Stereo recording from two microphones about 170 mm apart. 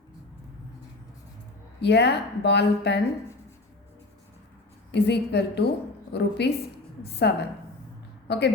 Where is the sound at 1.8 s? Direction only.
80° left.